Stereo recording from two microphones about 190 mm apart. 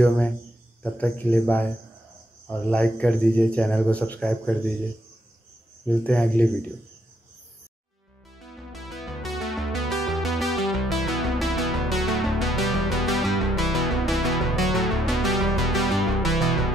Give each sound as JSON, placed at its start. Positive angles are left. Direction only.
{"t": 0.8, "sound": "speech", "side_deg": 5}
{"t": 5.9, "sound": "speech", "side_deg": 5}
{"t": 9.0, "sound": "music", "side_deg": 0}